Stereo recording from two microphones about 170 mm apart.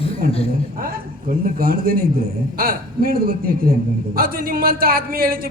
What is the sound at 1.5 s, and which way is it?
Speech, 60° right (ahead or behind).